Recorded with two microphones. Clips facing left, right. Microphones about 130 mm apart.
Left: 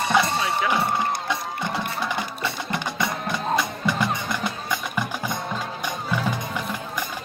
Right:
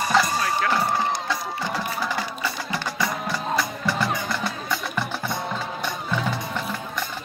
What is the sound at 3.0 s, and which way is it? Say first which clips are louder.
Music: right 1 dB; 20° left (ahead or behind).